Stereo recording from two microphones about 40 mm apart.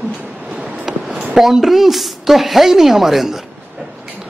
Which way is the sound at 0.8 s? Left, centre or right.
Centre.